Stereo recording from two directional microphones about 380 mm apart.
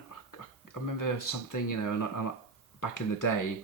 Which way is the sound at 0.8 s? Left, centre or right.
Left.